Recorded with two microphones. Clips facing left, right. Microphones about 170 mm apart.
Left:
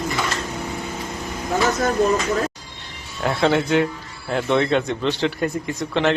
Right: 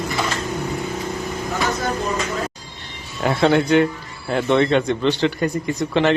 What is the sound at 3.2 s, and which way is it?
A man's voice, centre (ahead or behind).